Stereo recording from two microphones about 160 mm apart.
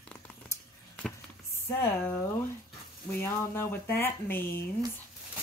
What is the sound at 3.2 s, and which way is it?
Speech, 15° left (ahead or behind).